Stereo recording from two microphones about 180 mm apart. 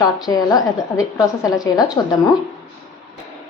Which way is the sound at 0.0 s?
20° left (ahead or behind).